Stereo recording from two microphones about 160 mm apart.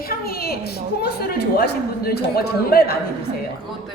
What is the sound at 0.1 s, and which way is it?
A man's voice, 75° left (ahead or behind).